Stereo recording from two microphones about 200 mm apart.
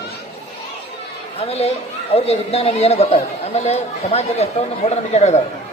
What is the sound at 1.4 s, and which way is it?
Speech, 30° left (ahead or behind).